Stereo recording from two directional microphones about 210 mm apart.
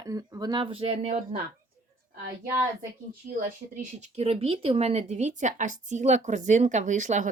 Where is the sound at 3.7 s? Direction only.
35° right (ahead or behind).